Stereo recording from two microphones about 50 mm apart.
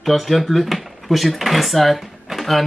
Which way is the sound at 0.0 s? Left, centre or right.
Centre.